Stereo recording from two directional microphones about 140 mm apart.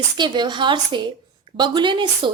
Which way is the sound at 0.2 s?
35° right (ahead or behind).